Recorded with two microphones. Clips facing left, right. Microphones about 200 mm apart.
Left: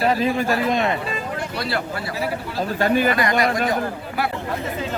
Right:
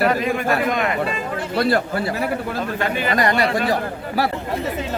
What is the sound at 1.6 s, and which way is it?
Speech, 50° right (ahead or behind).